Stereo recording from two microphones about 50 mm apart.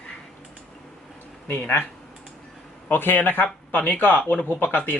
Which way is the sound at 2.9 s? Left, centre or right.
Left.